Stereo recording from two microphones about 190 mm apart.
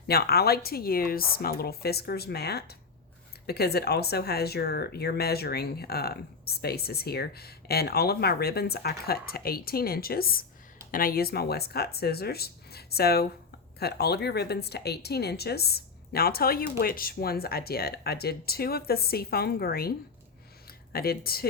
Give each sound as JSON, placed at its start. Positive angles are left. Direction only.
{"t": 0.1, "sound": "speech", "side_deg": 55}